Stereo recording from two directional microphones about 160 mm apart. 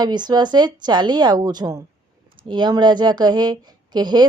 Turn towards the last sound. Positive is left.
turn(degrees=-25)  # may be behind; listen again after turning